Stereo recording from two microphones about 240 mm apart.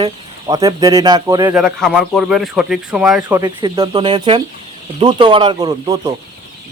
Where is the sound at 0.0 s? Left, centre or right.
Centre.